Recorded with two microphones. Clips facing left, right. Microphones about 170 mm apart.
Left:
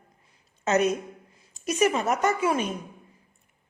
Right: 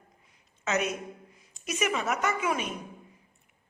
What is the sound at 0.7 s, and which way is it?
A woman's voice, 35° left (ahead or behind).